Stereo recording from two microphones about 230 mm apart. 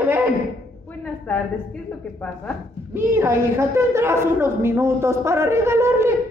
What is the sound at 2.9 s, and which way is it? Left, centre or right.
A woman's voice, centre.